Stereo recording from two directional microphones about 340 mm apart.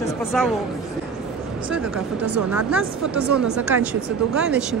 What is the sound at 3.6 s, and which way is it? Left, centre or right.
Speech, centre.